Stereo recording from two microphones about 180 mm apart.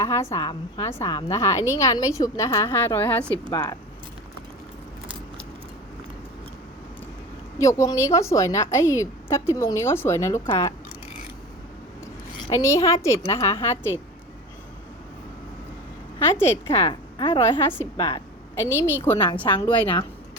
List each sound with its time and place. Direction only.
0.0 s a woman's voice: 15° left (ahead or behind)
7.6 s a woman's voice: 15° left (ahead or behind)
12.5 s a woman's voice: 15° left (ahead or behind)
16.2 s a woman's voice: 15° left (ahead or behind)
16.9 s a woman's voice: 25° left (ahead or behind)
17.7 s a woman's voice: 10° left (ahead or behind)
19.5 s a woman's voice: 25° left (ahead or behind)